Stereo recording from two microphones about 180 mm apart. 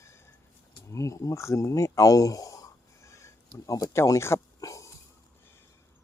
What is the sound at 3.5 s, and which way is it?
Speech, 20° left (ahead or behind).